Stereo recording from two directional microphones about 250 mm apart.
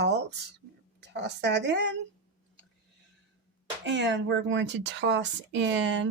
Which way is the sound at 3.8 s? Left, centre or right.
Right.